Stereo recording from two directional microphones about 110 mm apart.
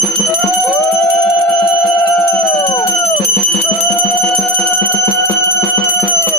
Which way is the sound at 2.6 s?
50° left (ahead or behind).